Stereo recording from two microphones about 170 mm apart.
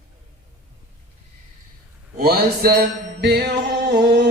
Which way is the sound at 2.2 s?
60° right (ahead or behind).